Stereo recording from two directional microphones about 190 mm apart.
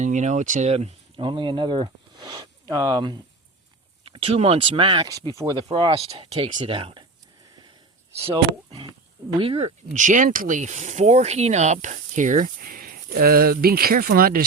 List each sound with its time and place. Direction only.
0.0 s speech: 40° right (ahead or behind)
9.4 s speech: 30° right (ahead or behind); by 14.4 s 50° right (ahead or behind)